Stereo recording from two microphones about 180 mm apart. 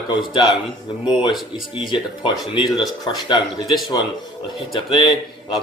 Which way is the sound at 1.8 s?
25° left (ahead or behind).